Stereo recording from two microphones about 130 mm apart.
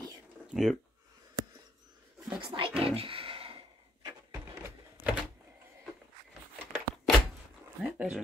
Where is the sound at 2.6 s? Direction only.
45° right (ahead or behind).